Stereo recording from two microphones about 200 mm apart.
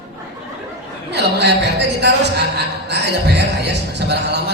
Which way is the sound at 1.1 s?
55° right (ahead or behind).